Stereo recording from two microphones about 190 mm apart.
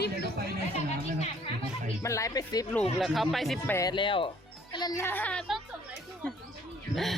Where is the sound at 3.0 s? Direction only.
Centre (ahead or behind).